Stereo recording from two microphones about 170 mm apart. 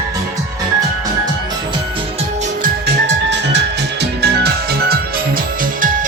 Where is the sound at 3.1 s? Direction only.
90° right.